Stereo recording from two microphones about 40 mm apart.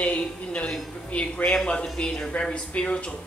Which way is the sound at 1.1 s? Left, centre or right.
Left.